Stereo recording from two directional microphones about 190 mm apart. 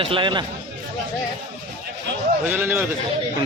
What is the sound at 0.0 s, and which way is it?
Speech, 25° right (ahead or behind).